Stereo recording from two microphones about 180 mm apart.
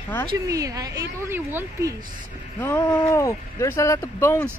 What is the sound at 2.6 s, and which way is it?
Speech, 10° left (ahead or behind).